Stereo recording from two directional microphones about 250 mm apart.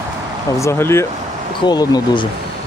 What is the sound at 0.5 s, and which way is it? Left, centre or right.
Speech, centre.